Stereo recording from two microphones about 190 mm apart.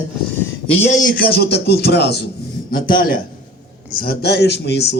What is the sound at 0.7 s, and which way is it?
A man's voice, 35° left (ahead or behind).